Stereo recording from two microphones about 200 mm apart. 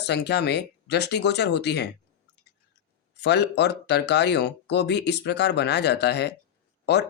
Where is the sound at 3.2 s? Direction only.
55° left (ahead or behind).